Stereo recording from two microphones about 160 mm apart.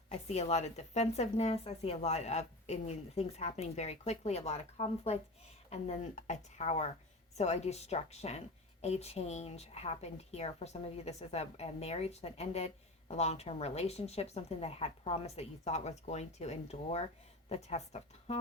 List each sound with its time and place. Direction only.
0.1 s a woman's voice: 45° left (ahead or behind)